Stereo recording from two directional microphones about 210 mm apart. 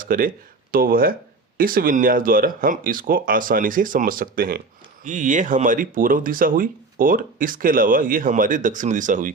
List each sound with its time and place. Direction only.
0.0 s speech: 40° right (ahead or behind)